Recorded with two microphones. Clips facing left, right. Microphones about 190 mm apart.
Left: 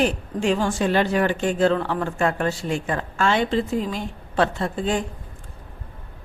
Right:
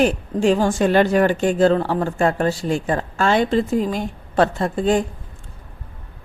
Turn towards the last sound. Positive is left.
turn(degrees=-40)  # may be behind; listen again after turning